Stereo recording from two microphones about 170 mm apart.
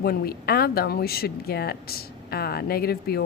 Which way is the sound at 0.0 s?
65° left (ahead or behind).